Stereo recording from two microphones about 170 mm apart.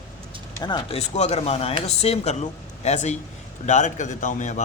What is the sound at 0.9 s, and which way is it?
A man's voice, 40° left (ahead or behind).